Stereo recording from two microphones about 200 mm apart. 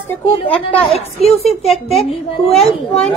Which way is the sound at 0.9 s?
30° left (ahead or behind).